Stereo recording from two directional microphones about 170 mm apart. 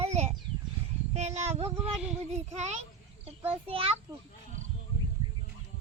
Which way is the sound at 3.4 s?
35° right (ahead or behind).